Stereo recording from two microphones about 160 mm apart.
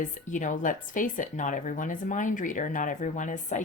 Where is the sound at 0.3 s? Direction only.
50° left (ahead or behind).